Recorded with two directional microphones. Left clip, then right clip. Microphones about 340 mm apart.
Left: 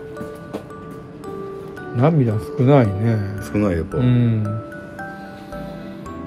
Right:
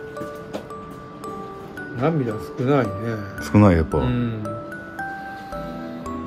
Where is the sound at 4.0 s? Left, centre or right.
Centre.